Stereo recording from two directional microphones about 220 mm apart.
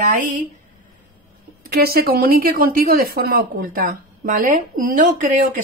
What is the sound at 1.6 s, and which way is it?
A woman's voice, 45° right (ahead or behind).